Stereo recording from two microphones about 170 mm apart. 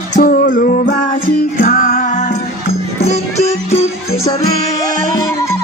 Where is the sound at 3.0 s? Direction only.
40° left (ahead or behind).